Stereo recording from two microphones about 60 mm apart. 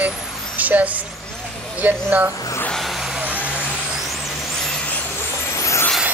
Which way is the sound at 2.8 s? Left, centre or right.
Centre.